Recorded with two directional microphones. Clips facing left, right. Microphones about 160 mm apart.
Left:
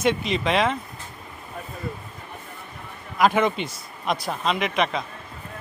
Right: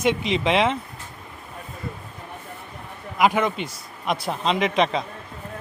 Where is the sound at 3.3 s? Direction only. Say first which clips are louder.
Left 1 dB; centre (ahead or behind).